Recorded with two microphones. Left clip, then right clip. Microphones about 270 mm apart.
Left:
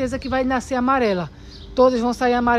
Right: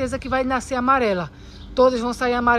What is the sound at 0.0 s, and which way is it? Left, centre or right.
Speech, centre.